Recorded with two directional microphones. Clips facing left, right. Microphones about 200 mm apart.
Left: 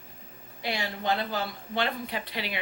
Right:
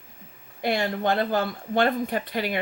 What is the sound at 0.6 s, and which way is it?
Speech, 50° right (ahead or behind).